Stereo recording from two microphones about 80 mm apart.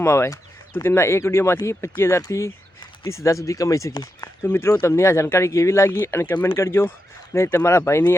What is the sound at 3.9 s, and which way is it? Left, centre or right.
Speech, left.